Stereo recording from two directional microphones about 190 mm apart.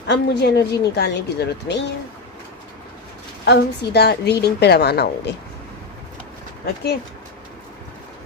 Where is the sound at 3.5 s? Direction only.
60° left (ahead or behind).